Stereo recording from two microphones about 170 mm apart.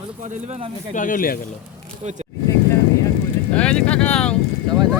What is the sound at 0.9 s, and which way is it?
Speech, 50° left (ahead or behind).